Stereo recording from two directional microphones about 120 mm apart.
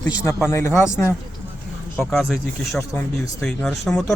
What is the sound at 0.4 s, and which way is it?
Speech, 25° left (ahead or behind).